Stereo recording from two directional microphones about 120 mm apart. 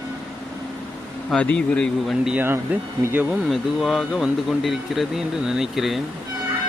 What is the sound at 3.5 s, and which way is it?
Speech, centre (ahead or behind).